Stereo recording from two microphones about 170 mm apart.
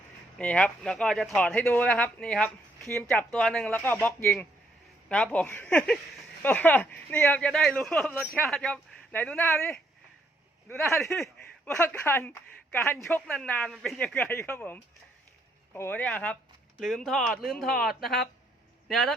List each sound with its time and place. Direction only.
0.3 s speech: 5° left (ahead or behind)
11.1 s speech: 5° left (ahead or behind)